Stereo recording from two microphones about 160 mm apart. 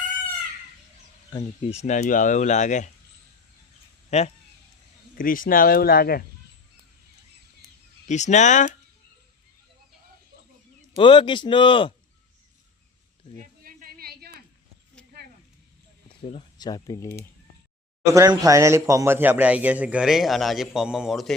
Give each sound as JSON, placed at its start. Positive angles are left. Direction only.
{"t": 1.7, "sound": "speech", "side_deg": 45}
{"t": 4.1, "sound": "a man's voice", "side_deg": 40}
{"t": 5.1, "sound": "speech", "side_deg": 60}
{"t": 8.0, "sound": "speech", "side_deg": 45}
{"t": 10.9, "sound": "a man's voice", "side_deg": 30}
{"t": 13.3, "sound": "a sound", "side_deg": -55}
{"t": 16.0, "sound": "a sound", "side_deg": 35}
{"t": 16.6, "sound": "speech", "side_deg": 25}
{"t": 18.1, "sound": "a man's voice", "side_deg": -20}